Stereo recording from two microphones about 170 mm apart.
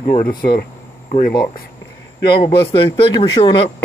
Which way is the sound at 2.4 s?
30° left (ahead or behind).